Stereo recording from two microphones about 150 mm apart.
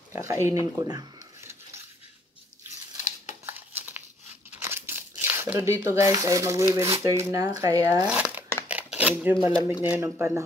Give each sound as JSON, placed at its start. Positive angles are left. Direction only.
{"t": 0.1, "sound": "speech", "side_deg": -20}
{"t": 3.4, "sound": "crumpling", "side_deg": -15}
{"t": 5.2, "sound": "speech", "side_deg": -15}
{"t": 8.1, "sound": "speech", "side_deg": -10}
{"t": 8.6, "sound": "dishes", "side_deg": -10}
{"t": 9.9, "sound": "speech", "side_deg": -15}